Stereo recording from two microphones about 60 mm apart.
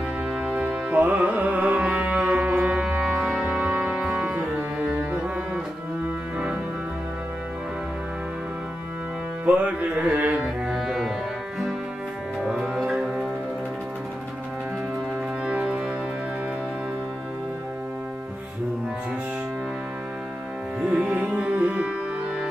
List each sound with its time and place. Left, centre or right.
0.4 s music: right
4.6 s music: right
9.5 s music: right
12.4 s music: centre
15.4 s music: centre
21.2 s tabla: centre